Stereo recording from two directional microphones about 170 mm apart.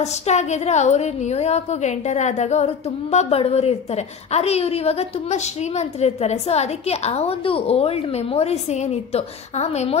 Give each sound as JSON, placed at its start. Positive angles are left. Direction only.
{"t": 0.0, "sound": "a woman's voice", "side_deg": 40}